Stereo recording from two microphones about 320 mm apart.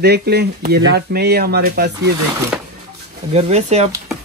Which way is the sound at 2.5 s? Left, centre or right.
Centre.